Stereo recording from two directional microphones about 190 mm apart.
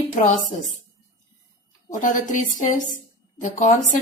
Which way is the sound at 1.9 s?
40° left (ahead or behind).